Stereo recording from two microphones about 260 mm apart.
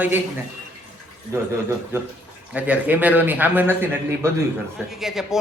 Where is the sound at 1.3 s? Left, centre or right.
Centre.